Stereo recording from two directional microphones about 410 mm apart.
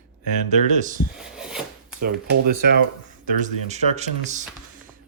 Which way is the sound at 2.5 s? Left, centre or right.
Right.